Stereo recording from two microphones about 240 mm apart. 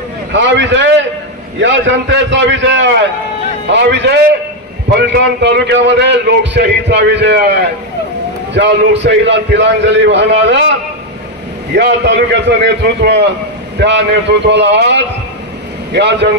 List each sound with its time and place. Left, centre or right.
0.3 s a man's voice: right
11.7 s a man's voice: right